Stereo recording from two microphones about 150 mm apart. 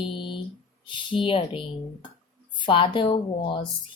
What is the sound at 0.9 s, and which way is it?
Speech, 35° left (ahead or behind).